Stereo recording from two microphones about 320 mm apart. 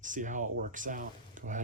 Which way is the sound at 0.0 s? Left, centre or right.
Right.